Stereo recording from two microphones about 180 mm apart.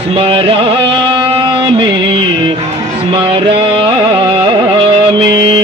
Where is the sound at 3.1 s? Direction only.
30° right (ahead or behind).